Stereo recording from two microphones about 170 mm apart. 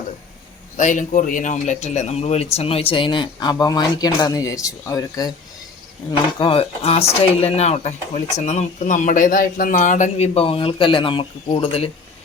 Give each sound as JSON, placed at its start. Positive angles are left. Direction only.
{"t": 0.8, "sound": "speech", "side_deg": 50}